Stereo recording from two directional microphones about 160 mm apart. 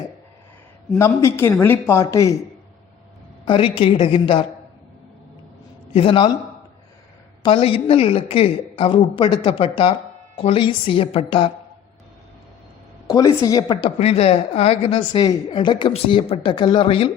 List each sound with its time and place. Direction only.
0.9 s speech: 20° left (ahead or behind)
3.4 s a woman's voice: 30° left (ahead or behind)
5.9 s a woman's voice: 35° left (ahead or behind)
7.4 s a woman's voice: 35° left (ahead or behind)
13.1 s a woman's voice: 25° left (ahead or behind)
14.0 s a woman's voice: 40° left (ahead or behind)